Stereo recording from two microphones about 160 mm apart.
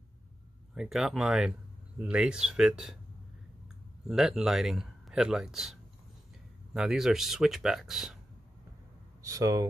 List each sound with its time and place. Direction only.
0.7 s speech: centre (ahead or behind)
4.1 s speech: 5° right (ahead or behind)
9.2 s speech: 20° right (ahead or behind)